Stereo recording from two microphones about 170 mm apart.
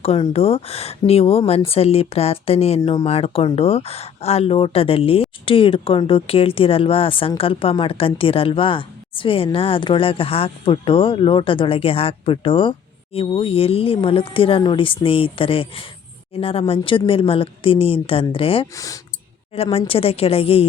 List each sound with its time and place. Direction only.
0.0 s speech: 35° left (ahead or behind)